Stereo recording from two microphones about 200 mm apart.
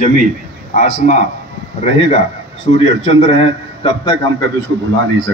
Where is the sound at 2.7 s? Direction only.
30° left (ahead or behind).